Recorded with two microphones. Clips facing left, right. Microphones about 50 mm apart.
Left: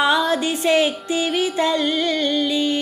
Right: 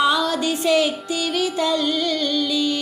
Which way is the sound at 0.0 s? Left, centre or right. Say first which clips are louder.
Left 1 dB; left.